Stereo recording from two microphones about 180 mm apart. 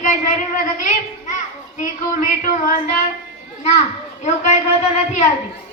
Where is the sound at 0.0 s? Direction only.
45° left (ahead or behind).